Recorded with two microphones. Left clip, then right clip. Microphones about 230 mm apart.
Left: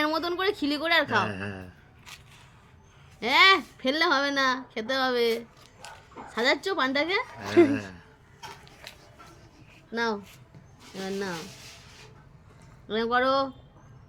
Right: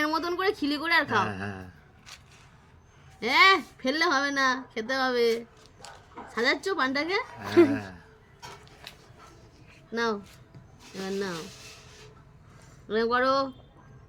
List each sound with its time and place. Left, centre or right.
0.0 s a sound: centre
1.3 s a woman's voice: centre
2.1 s a sound: left
3.2 s a woman's voice: centre
7.7 s a woman's voice: centre
9.9 s a woman's voice: centre
12.9 s a woman's voice: centre